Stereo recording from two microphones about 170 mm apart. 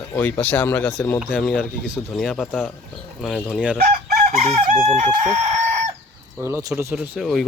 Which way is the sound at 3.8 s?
60° right (ahead or behind).